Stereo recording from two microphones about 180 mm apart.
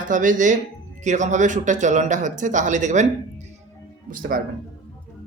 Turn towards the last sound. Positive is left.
turn(degrees=-55)  # may be behind; listen again after turning